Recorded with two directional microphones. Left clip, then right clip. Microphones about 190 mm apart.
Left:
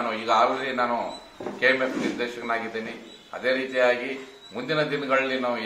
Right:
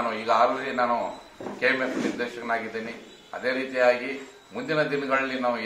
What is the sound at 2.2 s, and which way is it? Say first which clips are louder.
A man's voice: left 1 dB; 15° left (ahead or behind).